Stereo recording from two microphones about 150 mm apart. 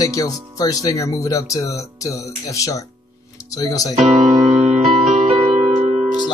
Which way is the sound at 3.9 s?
45° right (ahead or behind).